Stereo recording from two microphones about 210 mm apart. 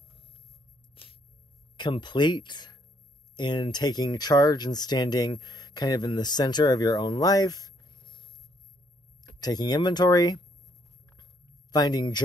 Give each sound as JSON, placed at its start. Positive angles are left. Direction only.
{"t": 1.8, "sound": "speech", "side_deg": 20}
{"t": 9.4, "sound": "speech", "side_deg": 20}
{"t": 11.7, "sound": "speech", "side_deg": 20}